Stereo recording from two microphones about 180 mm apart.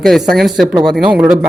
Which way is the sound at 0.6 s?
25° right (ahead or behind).